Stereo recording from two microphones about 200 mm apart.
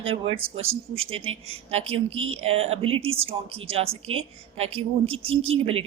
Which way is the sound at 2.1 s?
90° right.